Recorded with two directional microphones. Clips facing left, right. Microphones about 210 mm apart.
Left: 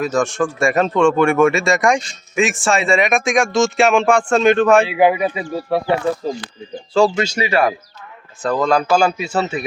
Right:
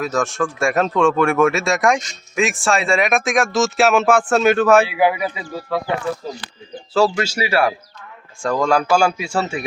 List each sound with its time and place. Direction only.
0.0 s speech: centre (ahead or behind)
4.9 s speech: 20° left (ahead or behind)
7.2 s speech: 5° right (ahead or behind)